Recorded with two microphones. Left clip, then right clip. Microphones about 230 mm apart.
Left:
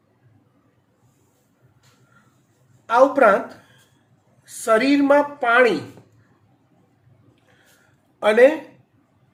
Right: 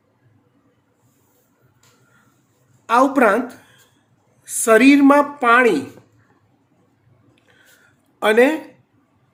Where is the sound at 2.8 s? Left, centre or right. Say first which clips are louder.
Even; right.